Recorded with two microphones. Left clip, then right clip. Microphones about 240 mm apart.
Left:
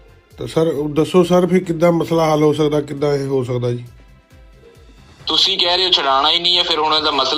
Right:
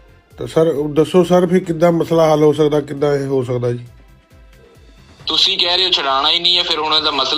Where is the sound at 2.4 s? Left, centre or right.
Right.